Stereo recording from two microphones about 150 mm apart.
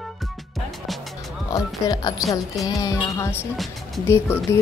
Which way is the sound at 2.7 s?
25° left (ahead or behind).